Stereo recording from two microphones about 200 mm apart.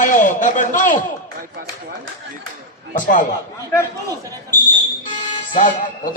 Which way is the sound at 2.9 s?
40° left (ahead or behind).